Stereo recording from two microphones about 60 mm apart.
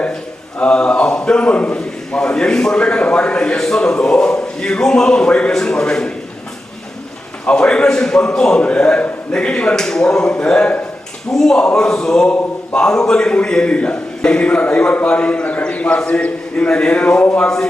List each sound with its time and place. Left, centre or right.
0.6 s a man's voice: centre
7.4 s a man's voice: centre